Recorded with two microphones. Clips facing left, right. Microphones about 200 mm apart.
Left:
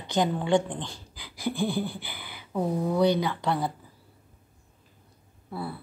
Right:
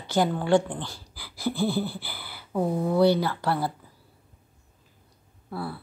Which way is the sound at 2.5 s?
5° right (ahead or behind).